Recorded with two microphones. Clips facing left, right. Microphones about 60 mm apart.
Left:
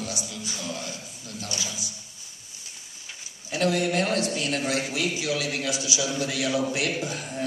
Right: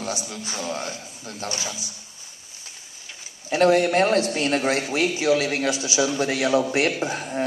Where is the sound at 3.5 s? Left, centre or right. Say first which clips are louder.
Right 6 dB; right.